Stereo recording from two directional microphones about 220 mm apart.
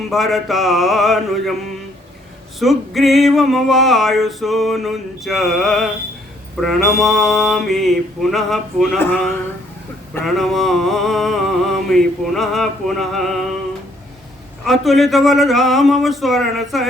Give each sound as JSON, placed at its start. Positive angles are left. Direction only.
{"t": 0.1, "sound": "male singing", "side_deg": 0}
{"t": 2.6, "sound": "male singing", "side_deg": 0}
{"t": 14.6, "sound": "male singing", "side_deg": 0}